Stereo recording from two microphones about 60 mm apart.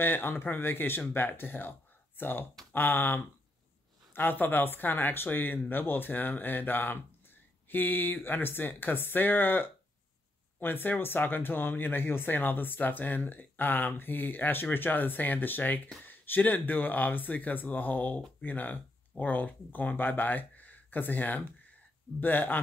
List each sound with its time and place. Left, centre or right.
0.0 s speech: left